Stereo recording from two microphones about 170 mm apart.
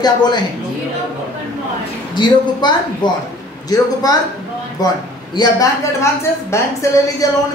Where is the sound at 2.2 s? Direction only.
25° left (ahead or behind).